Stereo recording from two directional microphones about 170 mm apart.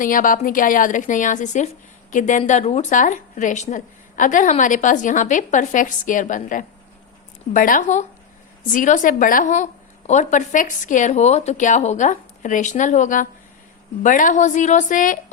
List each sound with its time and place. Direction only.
0.0 s a woman's voice: 50° left (ahead or behind)